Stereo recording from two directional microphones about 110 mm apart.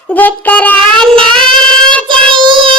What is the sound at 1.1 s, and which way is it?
Child singing, 50° right (ahead or behind).